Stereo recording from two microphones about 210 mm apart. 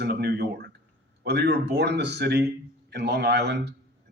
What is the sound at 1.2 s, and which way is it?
A man's voice, 50° right (ahead or behind).